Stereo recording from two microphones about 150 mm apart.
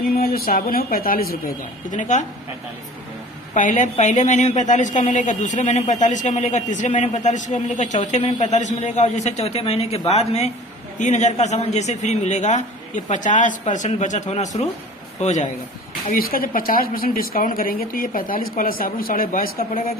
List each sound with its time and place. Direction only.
0.0 s a woman's voice: 80° left; by 2.2 s 55° left (ahead or behind)
3.5 s a woman's voice: 55° left (ahead or behind)
16.0 s a woman's voice: 75° left (ahead or behind)